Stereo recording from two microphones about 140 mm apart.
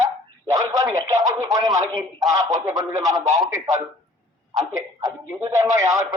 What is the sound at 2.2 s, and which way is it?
Speech, 20° right (ahead or behind).